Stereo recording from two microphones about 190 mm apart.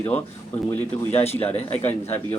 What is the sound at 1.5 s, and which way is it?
Speech, 35° left (ahead or behind).